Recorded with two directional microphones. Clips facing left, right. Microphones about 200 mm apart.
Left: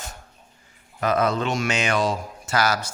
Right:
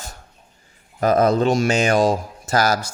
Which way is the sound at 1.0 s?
40° right (ahead or behind).